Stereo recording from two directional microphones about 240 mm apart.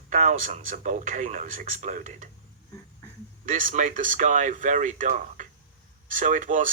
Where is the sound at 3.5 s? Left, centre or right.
Right.